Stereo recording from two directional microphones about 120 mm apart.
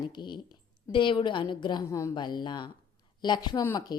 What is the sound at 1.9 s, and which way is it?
Speech, 25° left (ahead or behind).